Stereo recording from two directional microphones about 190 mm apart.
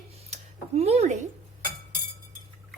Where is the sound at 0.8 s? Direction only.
35° right (ahead or behind).